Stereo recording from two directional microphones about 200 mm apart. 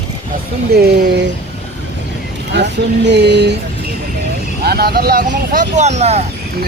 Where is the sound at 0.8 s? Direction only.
55° right (ahead or behind).